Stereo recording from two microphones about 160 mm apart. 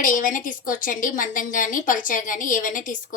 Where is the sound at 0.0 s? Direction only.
55° left (ahead or behind).